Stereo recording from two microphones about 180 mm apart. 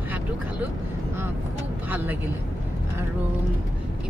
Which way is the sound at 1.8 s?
10° right (ahead or behind).